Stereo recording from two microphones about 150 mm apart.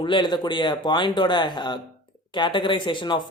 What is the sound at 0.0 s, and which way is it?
Speech, 30° left (ahead or behind).